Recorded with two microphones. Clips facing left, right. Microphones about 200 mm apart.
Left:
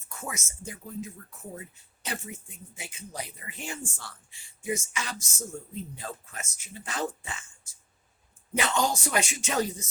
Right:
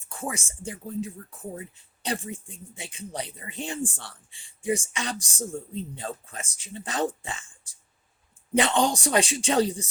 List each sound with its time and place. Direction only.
0.1 s speech: 30° right (ahead or behind)